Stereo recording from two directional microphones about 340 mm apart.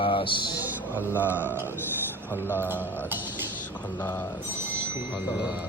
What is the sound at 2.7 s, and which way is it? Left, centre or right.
Music, centre.